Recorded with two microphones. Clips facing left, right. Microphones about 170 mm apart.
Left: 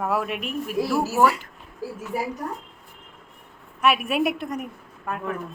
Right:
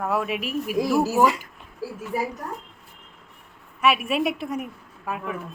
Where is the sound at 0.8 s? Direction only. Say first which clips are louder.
Right 1 dB; 15° right (ahead or behind).